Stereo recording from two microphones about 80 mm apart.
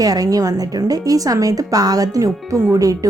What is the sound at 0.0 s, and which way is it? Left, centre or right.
A woman's voice, right.